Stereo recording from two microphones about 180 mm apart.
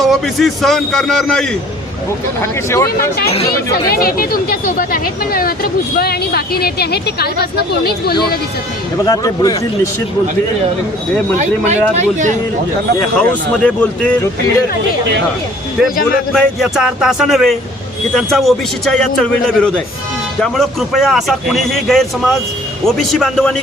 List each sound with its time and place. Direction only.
0.0 s a man's voice: centre (ahead or behind)
2.4 s speech: 15° left (ahead or behind)
3.8 s speech: 55° left (ahead or behind)
9.0 s speech: 20° left (ahead or behind)
11.3 s speech: 40° right (ahead or behind)
13.1 s speech: 5° left (ahead or behind)
16.3 s a man's voice: centre (ahead or behind)